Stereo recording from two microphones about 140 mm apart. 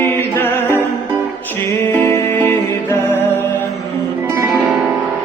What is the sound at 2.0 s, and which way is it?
Music, 15° left (ahead or behind).